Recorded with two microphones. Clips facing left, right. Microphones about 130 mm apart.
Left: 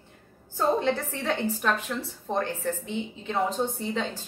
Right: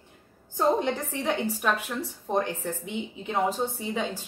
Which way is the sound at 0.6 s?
15° right (ahead or behind).